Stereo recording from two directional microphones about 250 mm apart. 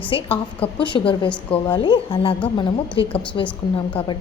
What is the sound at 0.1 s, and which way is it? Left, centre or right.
A woman's voice, left.